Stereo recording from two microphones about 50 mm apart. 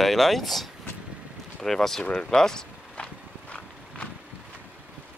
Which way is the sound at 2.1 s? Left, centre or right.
Centre.